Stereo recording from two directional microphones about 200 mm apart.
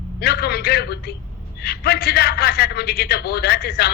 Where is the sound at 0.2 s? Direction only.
50° left (ahead or behind).